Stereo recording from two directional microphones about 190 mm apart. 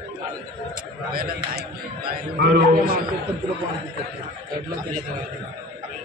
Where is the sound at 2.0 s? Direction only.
55° right (ahead or behind).